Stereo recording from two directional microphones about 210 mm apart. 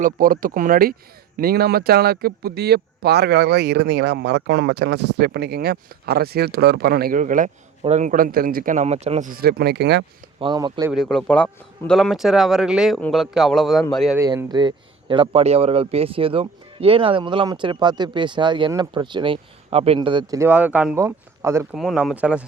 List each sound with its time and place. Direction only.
0.0 s speech: 40° right (ahead or behind)
10.4 s speech: 20° right (ahead or behind)
10.9 s speech: centre (ahead or behind)
14.2 s a man's voice: 15° right (ahead or behind)
21.8 s speech: centre (ahead or behind)